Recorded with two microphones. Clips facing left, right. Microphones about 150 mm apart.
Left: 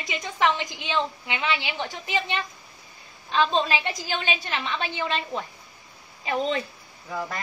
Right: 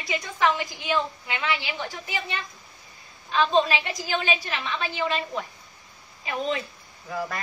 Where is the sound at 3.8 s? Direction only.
30° left (ahead or behind).